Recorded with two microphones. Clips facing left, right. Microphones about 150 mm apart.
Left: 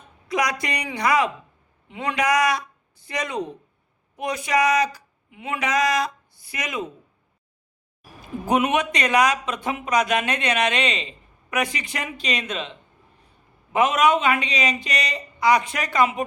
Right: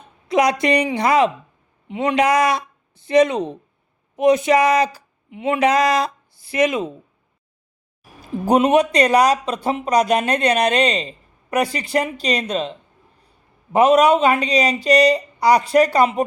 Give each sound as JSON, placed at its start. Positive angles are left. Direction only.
{"t": 0.3, "sound": "speech", "side_deg": -25}
{"t": 8.4, "sound": "speech", "side_deg": -35}
{"t": 13.7, "sound": "speech", "side_deg": -35}